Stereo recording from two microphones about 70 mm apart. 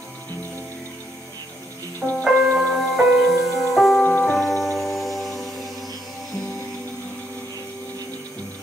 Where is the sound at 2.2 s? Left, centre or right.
Centre.